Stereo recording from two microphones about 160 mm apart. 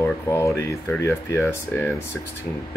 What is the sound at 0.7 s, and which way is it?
Speech, 15° left (ahead or behind).